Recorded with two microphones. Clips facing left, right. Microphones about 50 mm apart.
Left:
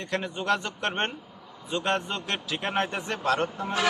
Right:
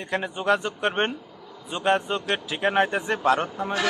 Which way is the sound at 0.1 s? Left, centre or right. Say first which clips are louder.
Right 4 dB; centre.